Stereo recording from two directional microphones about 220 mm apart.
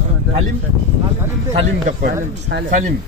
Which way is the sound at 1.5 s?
30° right (ahead or behind).